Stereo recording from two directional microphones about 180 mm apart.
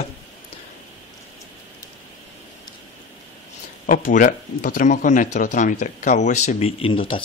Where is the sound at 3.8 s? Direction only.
50° left (ahead or behind); by 7.2 s 30° left (ahead or behind).